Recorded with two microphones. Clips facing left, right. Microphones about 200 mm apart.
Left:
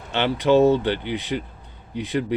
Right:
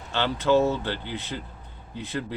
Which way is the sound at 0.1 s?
20° left (ahead or behind).